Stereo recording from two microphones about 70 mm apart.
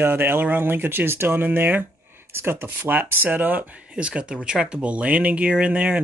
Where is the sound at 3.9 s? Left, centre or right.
Centre.